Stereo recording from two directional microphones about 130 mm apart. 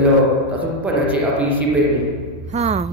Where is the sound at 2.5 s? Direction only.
55° right (ahead or behind).